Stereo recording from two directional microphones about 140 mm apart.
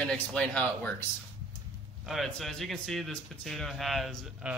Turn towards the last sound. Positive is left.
turn(degrees=0)  # may be behind; listen again after turning